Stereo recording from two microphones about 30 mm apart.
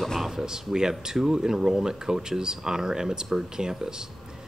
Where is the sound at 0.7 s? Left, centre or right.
Right.